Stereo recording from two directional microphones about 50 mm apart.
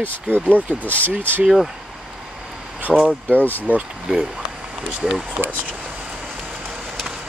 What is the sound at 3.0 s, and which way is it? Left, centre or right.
Speech, left.